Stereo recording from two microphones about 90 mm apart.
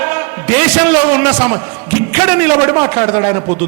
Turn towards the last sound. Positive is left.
turn(degrees=-25)  # may be behind; listen again after turning